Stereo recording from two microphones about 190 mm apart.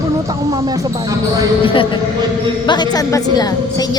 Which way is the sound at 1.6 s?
25° left (ahead or behind).